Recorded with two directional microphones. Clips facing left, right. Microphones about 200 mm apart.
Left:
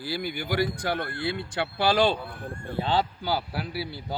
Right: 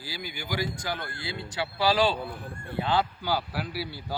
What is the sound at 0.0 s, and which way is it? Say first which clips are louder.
Speech: left 7 dB; 55° left (ahead or behind).